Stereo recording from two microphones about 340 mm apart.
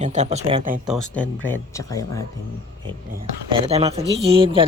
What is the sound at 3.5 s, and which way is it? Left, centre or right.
Speech, centre.